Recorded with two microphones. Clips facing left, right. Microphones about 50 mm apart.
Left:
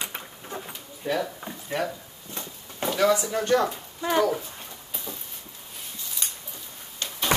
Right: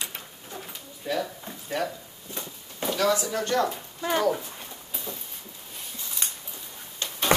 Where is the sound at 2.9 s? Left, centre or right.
Left.